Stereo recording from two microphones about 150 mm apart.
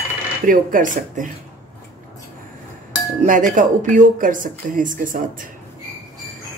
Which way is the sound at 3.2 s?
60° right (ahead or behind).